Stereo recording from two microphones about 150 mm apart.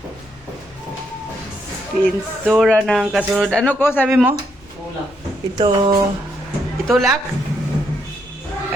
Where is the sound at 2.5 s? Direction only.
Centre (ahead or behind).